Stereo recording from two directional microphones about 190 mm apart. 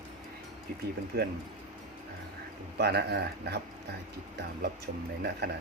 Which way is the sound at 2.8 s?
60° right (ahead or behind).